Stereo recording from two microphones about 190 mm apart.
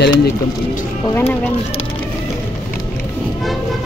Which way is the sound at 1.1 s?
10° left (ahead or behind).